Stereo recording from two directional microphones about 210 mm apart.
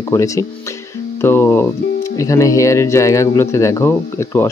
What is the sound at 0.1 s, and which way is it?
Speech, 15° left (ahead or behind).